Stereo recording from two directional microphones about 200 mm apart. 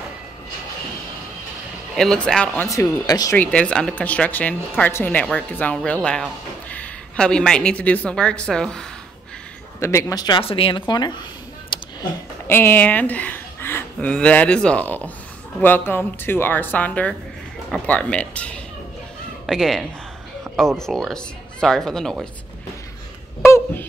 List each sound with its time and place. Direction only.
2.0 s speech: centre (ahead or behind)
3.3 s speech: 5° left (ahead or behind)
9.8 s speech: 15° left (ahead or behind)
12.4 s speech: 10° left (ahead or behind)
23.4 s a sound: 10° left (ahead or behind)